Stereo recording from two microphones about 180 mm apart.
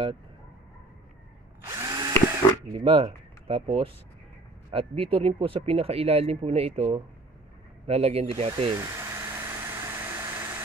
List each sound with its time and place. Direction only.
1.7 s drill: 20° right (ahead or behind)
2.7 s speech: 30° right (ahead or behind)
8.7 s vehicle: 15° right (ahead or behind)